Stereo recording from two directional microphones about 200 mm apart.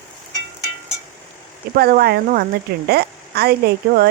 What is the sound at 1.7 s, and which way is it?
A woman's voice, 50° right (ahead or behind).